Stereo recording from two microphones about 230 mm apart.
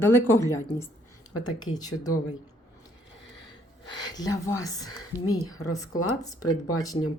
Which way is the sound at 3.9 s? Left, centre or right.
Centre.